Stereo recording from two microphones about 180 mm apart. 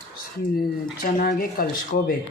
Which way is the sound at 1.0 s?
55° left (ahead or behind).